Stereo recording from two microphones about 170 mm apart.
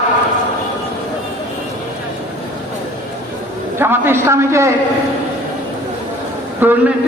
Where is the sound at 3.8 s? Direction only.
15° right (ahead or behind).